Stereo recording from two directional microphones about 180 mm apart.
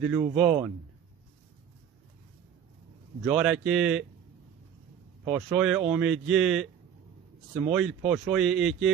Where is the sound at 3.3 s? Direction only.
Centre (ahead or behind).